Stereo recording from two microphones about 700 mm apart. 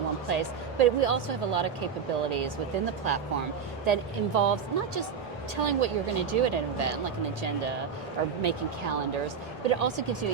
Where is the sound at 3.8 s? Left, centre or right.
Right.